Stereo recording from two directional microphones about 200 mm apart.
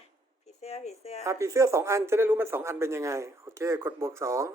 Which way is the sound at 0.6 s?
30° left (ahead or behind).